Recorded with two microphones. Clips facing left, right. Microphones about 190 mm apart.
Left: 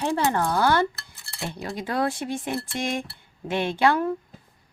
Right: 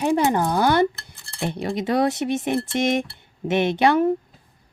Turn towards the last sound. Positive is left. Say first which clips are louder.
# right 4 dB
turn(degrees=-20)  # may be behind; listen again after turning